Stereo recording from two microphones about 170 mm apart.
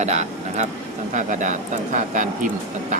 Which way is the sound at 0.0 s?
40° right (ahead or behind).